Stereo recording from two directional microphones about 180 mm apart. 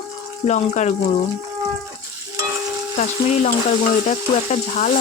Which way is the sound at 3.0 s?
40° left (ahead or behind).